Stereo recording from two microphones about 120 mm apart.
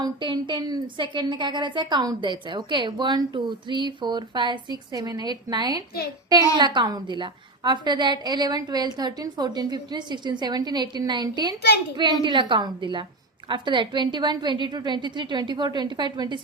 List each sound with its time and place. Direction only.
0.0 s a woman's voice: 40° right (ahead or behind)